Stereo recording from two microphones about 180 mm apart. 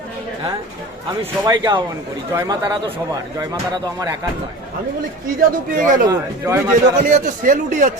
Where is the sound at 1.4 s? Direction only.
20° right (ahead or behind).